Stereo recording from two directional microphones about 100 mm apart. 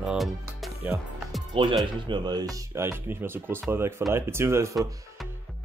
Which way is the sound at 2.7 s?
25° right (ahead or behind).